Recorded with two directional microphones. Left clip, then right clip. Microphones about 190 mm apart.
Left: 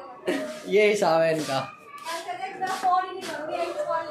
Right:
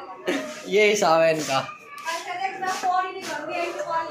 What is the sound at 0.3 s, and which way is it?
Speech, 15° left (ahead or behind).